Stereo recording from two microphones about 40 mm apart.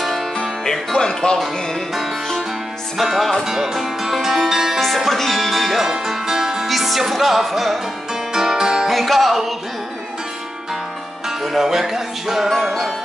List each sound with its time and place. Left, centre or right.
0.0 s music: centre
0.9 s speech: centre
3.0 s speech: centre
3.4 s music: centre
4.7 s speech: centre
5.9 s music: centre
8.3 s music: centre
8.9 s music: centre
11.4 s music: centre
12.4 s speech: centre